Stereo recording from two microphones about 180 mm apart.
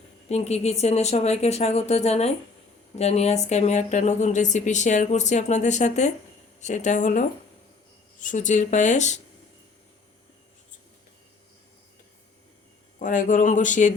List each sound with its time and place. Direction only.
0.3 s speech: 35° left (ahead or behind)
13.0 s speech: 45° left (ahead or behind)